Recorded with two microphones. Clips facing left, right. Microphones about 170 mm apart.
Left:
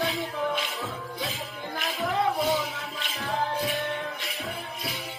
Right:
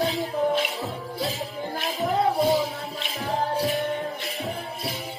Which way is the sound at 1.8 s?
30° right (ahead or behind).